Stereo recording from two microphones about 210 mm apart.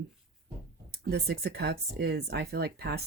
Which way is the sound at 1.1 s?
50° right (ahead or behind).